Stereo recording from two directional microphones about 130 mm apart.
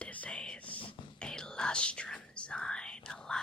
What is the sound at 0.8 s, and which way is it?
Whispering, 40° left (ahead or behind).